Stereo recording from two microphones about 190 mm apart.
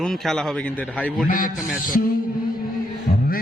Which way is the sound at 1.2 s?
45° left (ahead or behind).